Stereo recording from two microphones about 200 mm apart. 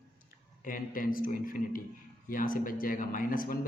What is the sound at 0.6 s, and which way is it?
A man's voice, 45° left (ahead or behind).